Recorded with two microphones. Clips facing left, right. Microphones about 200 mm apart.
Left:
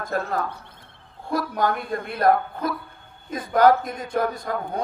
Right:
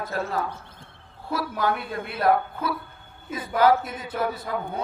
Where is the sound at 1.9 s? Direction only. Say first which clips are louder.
Left 3 dB; 50° left (ahead or behind).